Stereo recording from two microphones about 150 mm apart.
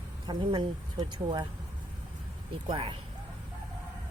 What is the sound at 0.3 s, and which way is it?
Speech, 30° right (ahead or behind).